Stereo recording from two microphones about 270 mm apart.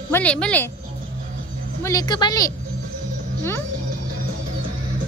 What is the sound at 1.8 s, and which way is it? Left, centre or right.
Speech, centre.